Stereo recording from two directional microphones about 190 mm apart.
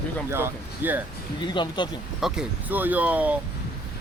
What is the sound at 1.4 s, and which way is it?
Speech, 25° left (ahead or behind).